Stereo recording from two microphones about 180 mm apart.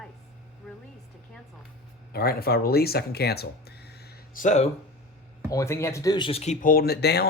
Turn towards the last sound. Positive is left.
turn(degrees=65)  # may be behind; listen again after turning